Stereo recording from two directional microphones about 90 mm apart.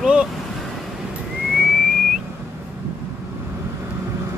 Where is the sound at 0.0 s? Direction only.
10° right (ahead or behind).